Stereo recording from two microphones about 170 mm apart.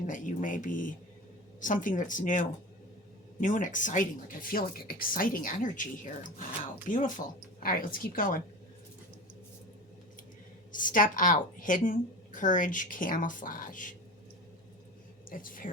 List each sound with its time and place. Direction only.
0.1 s a woman's voice: 50° left (ahead or behind)
10.7 s a woman's voice: 50° left (ahead or behind)
15.3 s a woman's voice: 55° left (ahead or behind)